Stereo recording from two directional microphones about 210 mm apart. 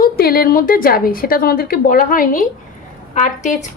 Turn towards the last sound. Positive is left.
turn(degrees=35)  # may be behind; listen again after turning